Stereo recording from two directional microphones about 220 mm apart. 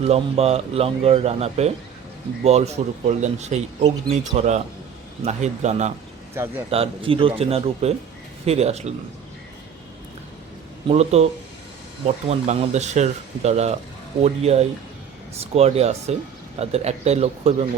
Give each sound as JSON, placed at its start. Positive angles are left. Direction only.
{"t": 0.0, "sound": "a man's voice", "side_deg": -30}
{"t": 10.8, "sound": "speech", "side_deg": -30}